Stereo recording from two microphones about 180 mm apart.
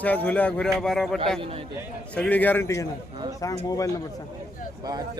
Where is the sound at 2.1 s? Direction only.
5° left (ahead or behind).